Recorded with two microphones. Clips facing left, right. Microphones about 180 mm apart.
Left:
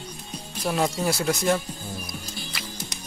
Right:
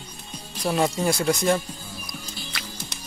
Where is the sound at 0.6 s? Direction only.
Centre (ahead or behind).